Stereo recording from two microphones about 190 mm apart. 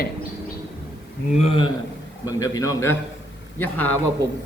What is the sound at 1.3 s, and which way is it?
Speech, 30° left (ahead or behind).